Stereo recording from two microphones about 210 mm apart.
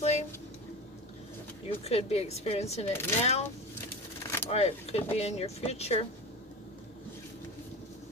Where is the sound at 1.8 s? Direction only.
30° left (ahead or behind).